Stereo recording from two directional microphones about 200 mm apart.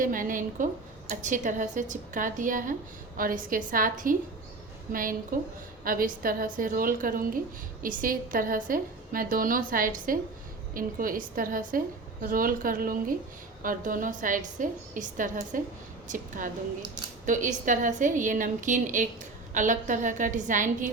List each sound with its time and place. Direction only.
0.0 s a woman's voice: 40° right (ahead or behind)